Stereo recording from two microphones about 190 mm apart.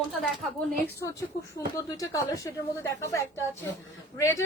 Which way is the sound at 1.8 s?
15° left (ahead or behind).